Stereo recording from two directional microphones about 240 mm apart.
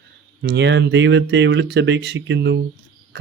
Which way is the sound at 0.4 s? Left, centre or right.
Right.